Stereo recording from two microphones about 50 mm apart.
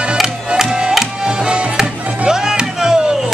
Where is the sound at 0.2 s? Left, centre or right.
Centre.